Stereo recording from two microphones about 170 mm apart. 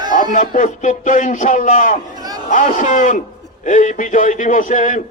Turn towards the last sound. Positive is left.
turn(degrees=45)  # may be behind; listen again after turning